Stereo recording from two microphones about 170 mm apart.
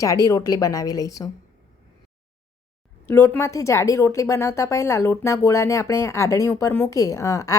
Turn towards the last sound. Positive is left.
turn(degrees=20)  # may be behind; listen again after turning